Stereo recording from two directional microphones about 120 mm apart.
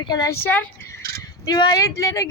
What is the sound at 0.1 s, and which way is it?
Speech, 30° left (ahead or behind).